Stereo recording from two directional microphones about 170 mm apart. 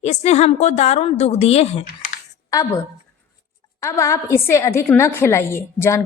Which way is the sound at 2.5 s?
20° left (ahead or behind).